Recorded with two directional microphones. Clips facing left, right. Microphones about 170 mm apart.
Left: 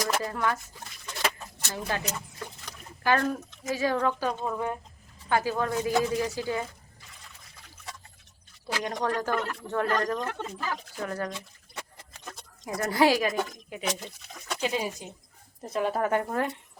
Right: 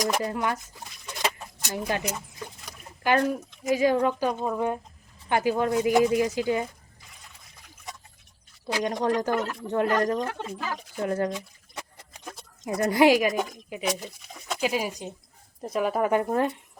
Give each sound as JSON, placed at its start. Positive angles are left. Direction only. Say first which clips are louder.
{"t": 0.0, "sound": "speech", "louder": "right 2 dB", "side_deg": -20}
{"t": 1.2, "sound": "a sound", "louder": "right 1 dB", "side_deg": -15}
{"t": 2.6, "sound": "speech", "louder": "right 1 dB", "side_deg": -15}
{"t": 8.6, "sound": "speech", "louder": "right 4 dB", "side_deg": -20}
{"t": 12.1, "sound": "a sound", "louder": "right 3 dB", "side_deg": -15}
{"t": 12.8, "sound": "speech", "louder": "right 4 dB", "side_deg": -20}